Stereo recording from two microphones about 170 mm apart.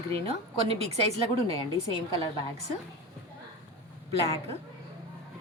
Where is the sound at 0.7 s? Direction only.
35° right (ahead or behind).